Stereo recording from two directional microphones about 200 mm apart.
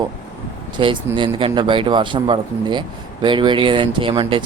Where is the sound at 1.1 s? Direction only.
25° right (ahead or behind).